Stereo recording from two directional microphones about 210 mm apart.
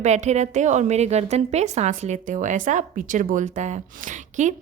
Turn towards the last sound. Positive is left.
turn(degrees=-35)  # may be behind; listen again after turning